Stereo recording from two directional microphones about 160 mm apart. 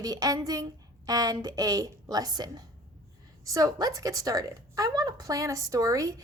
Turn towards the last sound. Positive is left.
turn(degrees=-20)  # may be behind; listen again after turning